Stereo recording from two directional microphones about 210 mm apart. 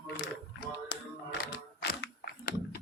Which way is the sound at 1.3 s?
55° left (ahead or behind).